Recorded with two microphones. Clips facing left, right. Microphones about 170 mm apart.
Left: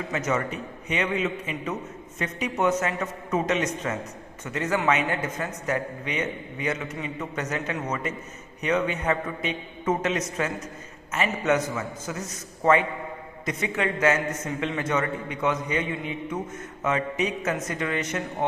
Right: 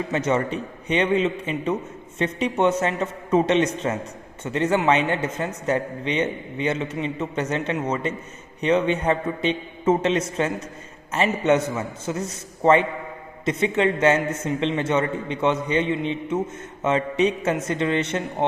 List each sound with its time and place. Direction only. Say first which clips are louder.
0.1 s a man's voice: right 4 dB; 30° right (ahead or behind)